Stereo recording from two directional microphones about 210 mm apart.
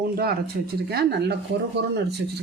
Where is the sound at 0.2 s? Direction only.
45° right (ahead or behind).